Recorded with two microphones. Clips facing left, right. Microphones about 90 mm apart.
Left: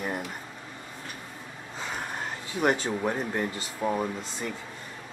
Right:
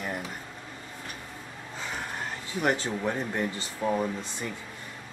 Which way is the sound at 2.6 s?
15° left (ahead or behind).